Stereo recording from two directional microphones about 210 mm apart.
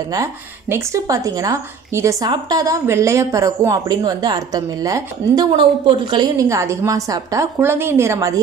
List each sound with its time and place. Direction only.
0.1 s a woman's voice: 15° right (ahead or behind)